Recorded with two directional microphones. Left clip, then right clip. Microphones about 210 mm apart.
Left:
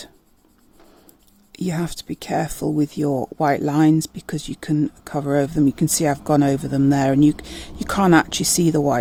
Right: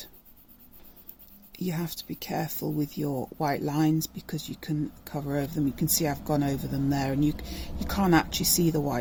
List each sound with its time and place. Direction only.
1.5 s speech: 40° left (ahead or behind)